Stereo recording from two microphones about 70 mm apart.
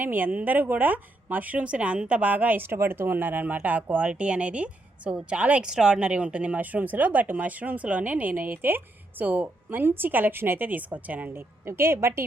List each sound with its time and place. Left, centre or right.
0.0 s a woman's voice: right
11.3 s a woman's voice: right